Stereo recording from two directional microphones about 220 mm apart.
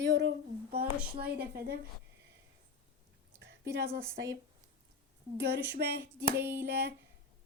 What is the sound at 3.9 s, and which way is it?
Speech, 15° right (ahead or behind).